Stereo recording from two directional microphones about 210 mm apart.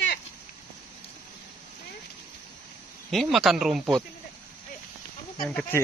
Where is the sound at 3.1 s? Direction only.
Centre (ahead or behind).